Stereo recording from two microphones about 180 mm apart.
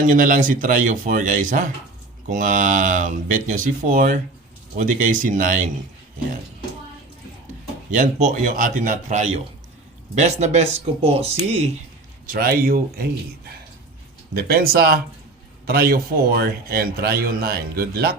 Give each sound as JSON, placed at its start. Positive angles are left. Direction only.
{"t": 0.1, "sound": "speech", "side_deg": -50}
{"t": 7.9, "sound": "speech", "side_deg": -45}
{"t": 12.2, "sound": "a man's voice", "side_deg": -50}